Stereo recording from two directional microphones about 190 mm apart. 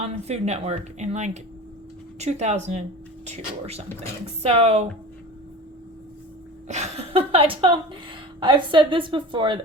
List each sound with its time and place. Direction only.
0.0 s speech: 35° right (ahead or behind)
6.7 s a woman's voice: 35° right (ahead or behind)